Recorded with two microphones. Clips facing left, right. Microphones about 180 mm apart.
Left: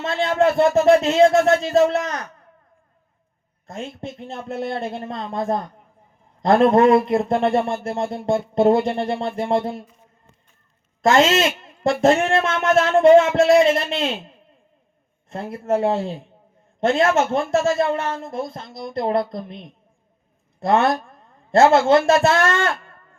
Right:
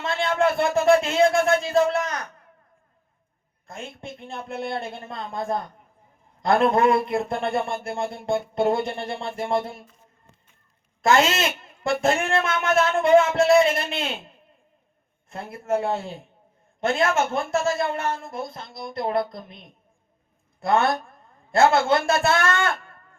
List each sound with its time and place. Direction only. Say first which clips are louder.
0.0 s speech: left 4 dB; 40° left (ahead or behind)
3.7 s speech: left 5 dB; 40° left (ahead or behind)
11.1 s speech: left 3 dB; 40° left (ahead or behind)
15.3 s speech: left 4 dB; 40° left (ahead or behind)
20.6 s a woman's voice: left 3 dB; 40° left (ahead or behind)